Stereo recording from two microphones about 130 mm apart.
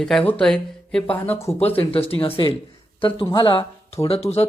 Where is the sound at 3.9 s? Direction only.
50° left (ahead or behind).